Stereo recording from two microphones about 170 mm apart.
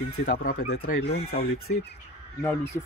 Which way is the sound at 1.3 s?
85° left.